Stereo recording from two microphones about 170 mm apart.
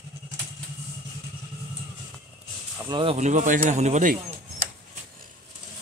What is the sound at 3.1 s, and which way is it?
Speech, 45° right (ahead or behind).